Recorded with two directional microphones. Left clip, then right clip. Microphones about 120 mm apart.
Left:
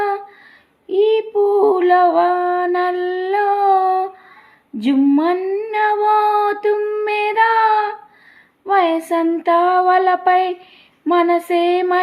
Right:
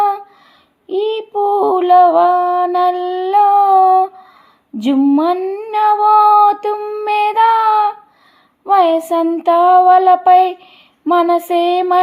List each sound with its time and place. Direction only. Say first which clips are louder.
0.9 s female singing: left 3 dB; 45° right (ahead or behind)
4.8 s child singing: right 2 dB; 40° right (ahead or behind)